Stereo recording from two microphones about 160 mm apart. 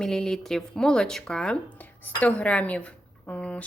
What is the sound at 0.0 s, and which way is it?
A woman's voice, 5° left (ahead or behind).